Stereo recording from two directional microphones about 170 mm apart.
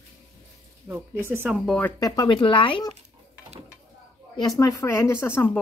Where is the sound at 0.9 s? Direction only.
15° right (ahead or behind).